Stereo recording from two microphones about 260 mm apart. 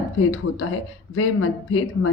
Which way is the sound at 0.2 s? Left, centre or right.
Left.